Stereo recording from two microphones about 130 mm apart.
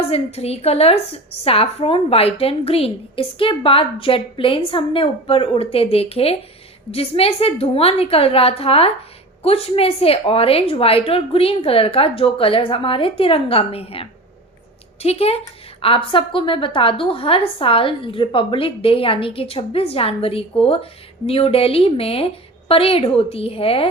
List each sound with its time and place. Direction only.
0.1 s a woman's voice: 50° left (ahead or behind)